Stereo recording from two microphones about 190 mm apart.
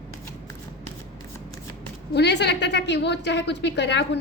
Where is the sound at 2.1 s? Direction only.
60° left (ahead or behind).